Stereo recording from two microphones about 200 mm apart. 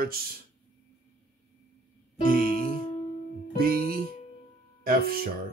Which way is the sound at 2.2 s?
45° right (ahead or behind).